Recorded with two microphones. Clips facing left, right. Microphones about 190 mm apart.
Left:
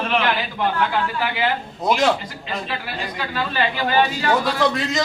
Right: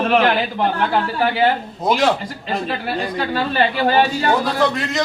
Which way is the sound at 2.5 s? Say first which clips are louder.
Right 6 dB; 35° right (ahead or behind).